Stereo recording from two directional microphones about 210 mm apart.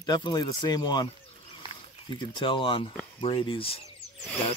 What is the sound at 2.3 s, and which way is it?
Speech, 25° left (ahead or behind).